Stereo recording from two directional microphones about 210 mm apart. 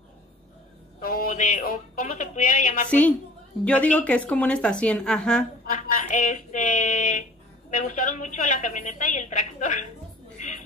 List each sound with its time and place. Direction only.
1.0 s a woman's voice: 45° left (ahead or behind)
2.9 s a woman's voice: 5° left (ahead or behind)
6.0 s a woman's voice: 35° left (ahead or behind)
10.3 s music: 35° left (ahead or behind)